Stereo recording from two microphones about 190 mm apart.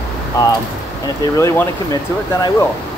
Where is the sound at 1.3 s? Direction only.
15° left (ahead or behind).